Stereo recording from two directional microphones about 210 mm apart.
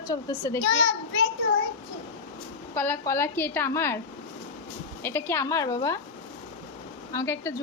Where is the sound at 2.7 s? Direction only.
10° left (ahead or behind).